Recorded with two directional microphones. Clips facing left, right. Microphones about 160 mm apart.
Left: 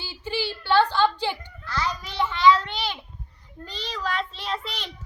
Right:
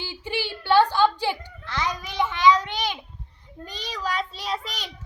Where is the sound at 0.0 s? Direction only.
15° right (ahead or behind).